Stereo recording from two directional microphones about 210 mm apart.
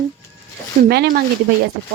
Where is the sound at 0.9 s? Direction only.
50° right (ahead or behind).